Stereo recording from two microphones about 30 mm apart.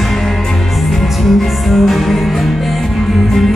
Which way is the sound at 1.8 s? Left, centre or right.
Centre.